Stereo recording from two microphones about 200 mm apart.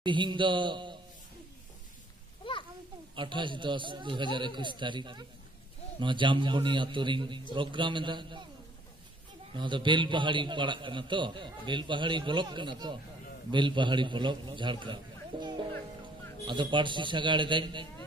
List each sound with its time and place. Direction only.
0.0 s a man's voice: 25° right (ahead or behind)
3.2 s a man's voice: 25° right (ahead or behind)
9.5 s a man's voice: 25° right (ahead or behind)